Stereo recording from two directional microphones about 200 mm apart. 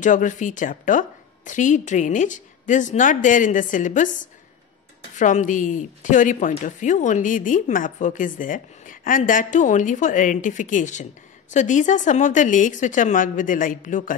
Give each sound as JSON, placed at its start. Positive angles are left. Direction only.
{"t": 0.0, "sound": "a woman's voice", "side_deg": 40}